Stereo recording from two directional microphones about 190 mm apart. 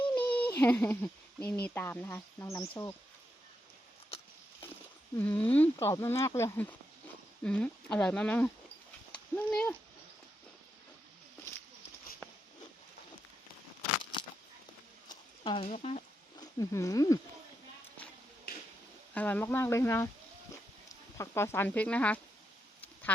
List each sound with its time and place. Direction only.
0.1 s a sound: 10° left (ahead or behind)
1.6 s speech: 10° left (ahead or behind)
5.1 s speech: 10° left (ahead or behind)
15.1 s speech: 25° left (ahead or behind)
16.4 s speech: 15° left (ahead or behind)
18.5 s a sound: 55° left (ahead or behind)
19.1 s speech: 10° left (ahead or behind)
21.2 s speech: 15° left (ahead or behind)